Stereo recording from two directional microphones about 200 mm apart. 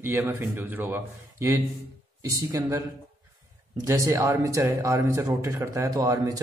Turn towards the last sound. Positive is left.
turn(degrees=-15)  # may be behind; listen again after turning